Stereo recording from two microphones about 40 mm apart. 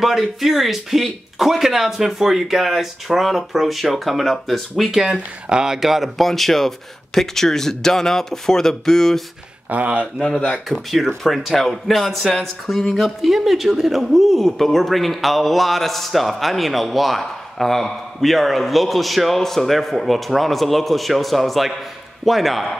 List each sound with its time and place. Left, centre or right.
0.0 s speech: centre
4.9 s speech: centre
6.2 s speech: centre
9.7 s speech: right
10.7 s speech: centre